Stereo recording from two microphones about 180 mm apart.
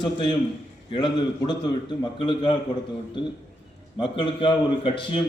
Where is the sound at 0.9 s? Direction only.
25° left (ahead or behind).